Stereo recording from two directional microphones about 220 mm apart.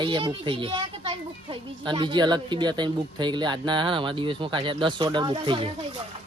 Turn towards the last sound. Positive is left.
turn(degrees=-20)  # may be behind; listen again after turning